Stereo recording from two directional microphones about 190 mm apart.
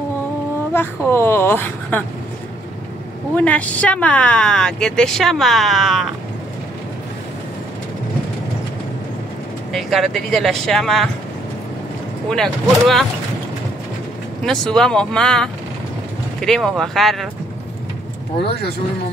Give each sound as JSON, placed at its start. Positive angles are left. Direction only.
{"t": 0.7, "sound": "speech", "side_deg": 10}
{"t": 3.3, "sound": "speech", "side_deg": 5}
{"t": 9.7, "sound": "speech", "side_deg": 0}
{"t": 12.3, "sound": "speech", "side_deg": 5}
{"t": 14.4, "sound": "speech", "side_deg": 5}